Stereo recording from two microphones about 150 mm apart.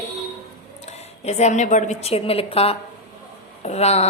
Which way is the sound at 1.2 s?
50° left (ahead or behind).